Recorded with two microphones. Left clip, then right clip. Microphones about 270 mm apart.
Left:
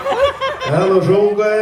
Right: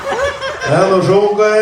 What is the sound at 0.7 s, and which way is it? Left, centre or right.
Speech, right.